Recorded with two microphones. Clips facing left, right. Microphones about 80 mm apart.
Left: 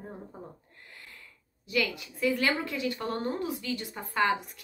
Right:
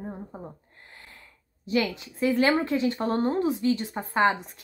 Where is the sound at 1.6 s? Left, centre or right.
Right.